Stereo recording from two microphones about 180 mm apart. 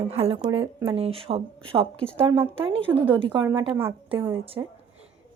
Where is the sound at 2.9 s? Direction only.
10° right (ahead or behind).